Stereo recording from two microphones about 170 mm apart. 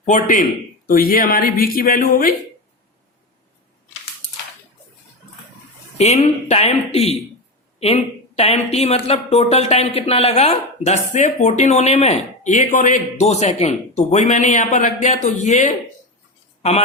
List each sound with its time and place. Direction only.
0.0 s speech: 50° left (ahead or behind)
6.0 s speech: 40° left (ahead or behind)